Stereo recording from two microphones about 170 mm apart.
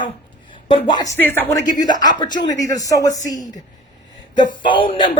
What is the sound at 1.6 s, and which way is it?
Speech, 25° left (ahead or behind).